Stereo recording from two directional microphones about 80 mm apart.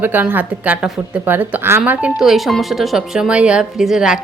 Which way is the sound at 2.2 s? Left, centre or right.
Centre.